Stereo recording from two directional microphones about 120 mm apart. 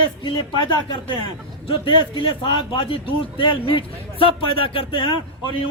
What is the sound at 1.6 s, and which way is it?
Speech, 45° left (ahead or behind).